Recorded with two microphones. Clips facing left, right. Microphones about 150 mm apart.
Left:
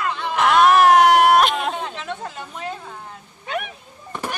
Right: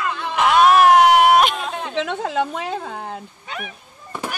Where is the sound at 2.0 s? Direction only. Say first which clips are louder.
Right 9 dB; 90° right.